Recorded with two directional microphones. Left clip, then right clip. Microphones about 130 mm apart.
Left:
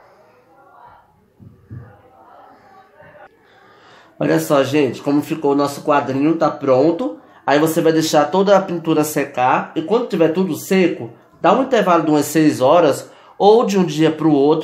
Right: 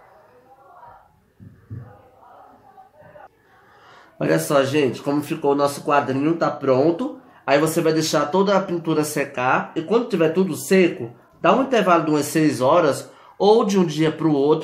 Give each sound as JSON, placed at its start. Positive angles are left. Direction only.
{"t": 4.2, "sound": "speech", "side_deg": 30}